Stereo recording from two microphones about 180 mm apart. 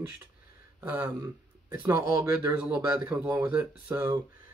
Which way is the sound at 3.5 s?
10° right (ahead or behind).